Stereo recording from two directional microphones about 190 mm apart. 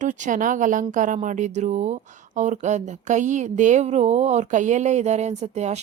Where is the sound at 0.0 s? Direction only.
40° right (ahead or behind).